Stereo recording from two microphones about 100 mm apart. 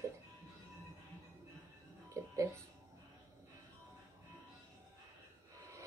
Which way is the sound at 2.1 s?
30° right (ahead or behind).